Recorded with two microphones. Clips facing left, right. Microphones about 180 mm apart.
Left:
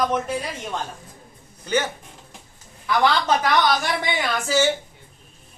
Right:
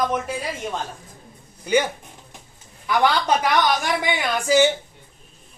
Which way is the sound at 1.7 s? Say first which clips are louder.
Right 3 dB; 15° right (ahead or behind).